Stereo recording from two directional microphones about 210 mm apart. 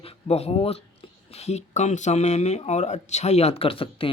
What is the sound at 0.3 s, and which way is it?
Speech, 30° left (ahead or behind).